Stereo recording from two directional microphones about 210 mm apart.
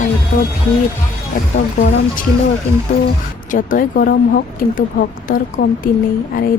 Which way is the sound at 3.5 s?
40° left (ahead or behind).